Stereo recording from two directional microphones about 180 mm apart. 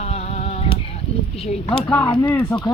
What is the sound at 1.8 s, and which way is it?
Speech, 10° left (ahead or behind).